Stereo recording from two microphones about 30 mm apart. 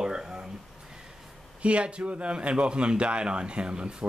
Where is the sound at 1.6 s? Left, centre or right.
Right.